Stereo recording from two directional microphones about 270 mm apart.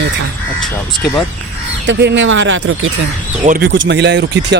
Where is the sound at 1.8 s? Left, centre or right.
Right.